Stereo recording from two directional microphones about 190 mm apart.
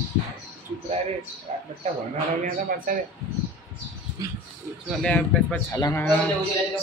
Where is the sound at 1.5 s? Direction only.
35° right (ahead or behind).